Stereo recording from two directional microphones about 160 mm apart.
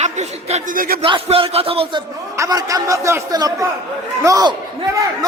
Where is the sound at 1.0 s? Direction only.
35° right (ahead or behind).